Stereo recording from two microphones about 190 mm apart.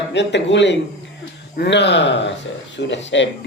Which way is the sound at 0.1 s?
65° left (ahead or behind).